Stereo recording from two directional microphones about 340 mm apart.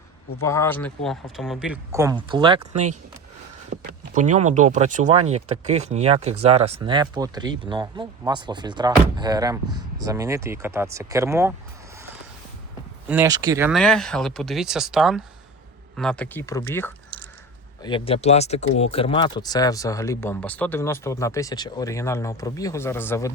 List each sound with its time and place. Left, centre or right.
0.4 s speech: centre
2.6 s speech: right
3.8 s speech: right
13.1 s speech: centre